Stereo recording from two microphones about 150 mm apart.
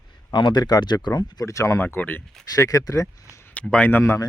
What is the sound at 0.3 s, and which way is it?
Speech, 30° left (ahead or behind).